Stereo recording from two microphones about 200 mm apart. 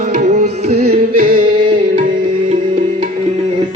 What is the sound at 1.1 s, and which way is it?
A capella, 45° right (ahead or behind).